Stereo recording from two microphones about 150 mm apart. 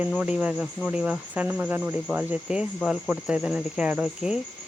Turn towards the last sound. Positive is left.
turn(degrees=-10)  # may be behind; listen again after turning